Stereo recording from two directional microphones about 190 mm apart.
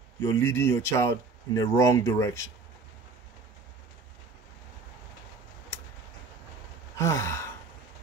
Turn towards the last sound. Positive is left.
turn(degrees=15)  # may be behind; listen again after turning